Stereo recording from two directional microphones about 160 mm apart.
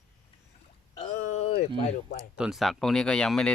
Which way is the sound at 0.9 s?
45° left (ahead or behind).